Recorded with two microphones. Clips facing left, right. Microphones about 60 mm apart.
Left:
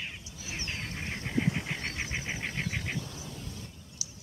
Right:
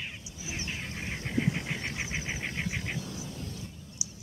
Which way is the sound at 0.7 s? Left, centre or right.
Centre.